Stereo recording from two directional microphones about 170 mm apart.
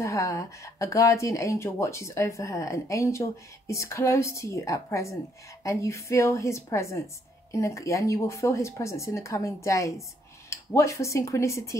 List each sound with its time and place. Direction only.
0.0 s speech: 20° left (ahead or behind)